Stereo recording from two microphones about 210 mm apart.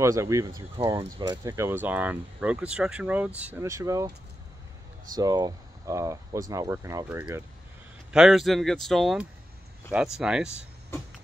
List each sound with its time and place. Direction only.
0.0 s speech: 15° right (ahead or behind)
5.1 s speech: 20° right (ahead or behind)